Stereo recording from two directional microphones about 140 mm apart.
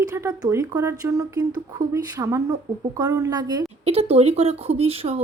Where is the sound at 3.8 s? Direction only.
45° right (ahead or behind).